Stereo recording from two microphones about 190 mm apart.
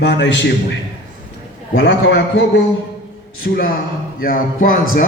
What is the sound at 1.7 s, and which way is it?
Speech, 65° left (ahead or behind).